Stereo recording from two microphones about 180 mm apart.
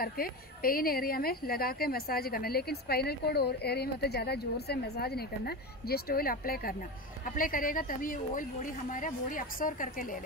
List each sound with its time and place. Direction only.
0.0 s speech: 55° left (ahead or behind)